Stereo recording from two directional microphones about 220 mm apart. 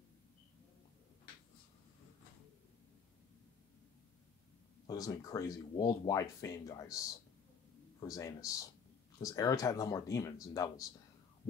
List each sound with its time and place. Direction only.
4.8 s speech: 15° left (ahead or behind)
8.0 s speech: 15° left (ahead or behind)